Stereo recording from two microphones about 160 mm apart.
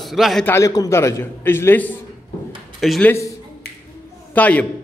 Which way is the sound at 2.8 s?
Centre (ahead or behind).